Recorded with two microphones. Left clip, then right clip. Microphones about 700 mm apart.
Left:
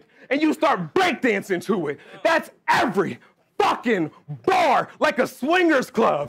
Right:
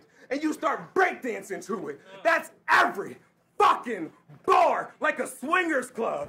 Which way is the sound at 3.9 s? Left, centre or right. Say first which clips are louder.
Left 11 dB; left.